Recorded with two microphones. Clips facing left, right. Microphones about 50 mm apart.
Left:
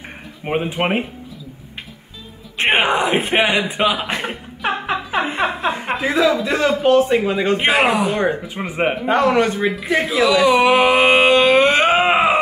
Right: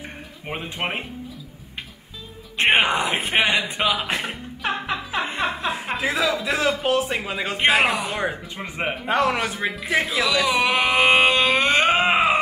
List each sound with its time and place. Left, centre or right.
0.5 s speech: left
2.5 s speech: centre
4.6 s music: left
5.1 s a sound: centre
5.9 s speech: centre
8.4 s speech: centre
9.0 s a man's voice: centre